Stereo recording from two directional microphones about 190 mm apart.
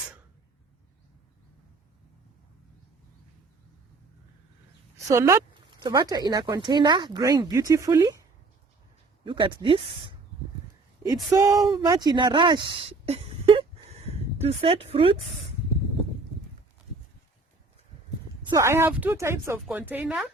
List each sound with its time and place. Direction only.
4.9 s speech: 15° right (ahead or behind)
9.2 s speech: 25° right (ahead or behind)
18.4 s a woman's voice: 15° right (ahead or behind)